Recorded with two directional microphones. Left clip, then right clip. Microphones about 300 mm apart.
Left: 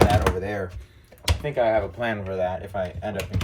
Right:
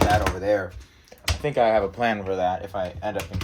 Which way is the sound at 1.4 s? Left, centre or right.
Right.